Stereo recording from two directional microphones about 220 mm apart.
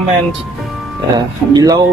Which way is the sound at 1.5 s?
15° right (ahead or behind).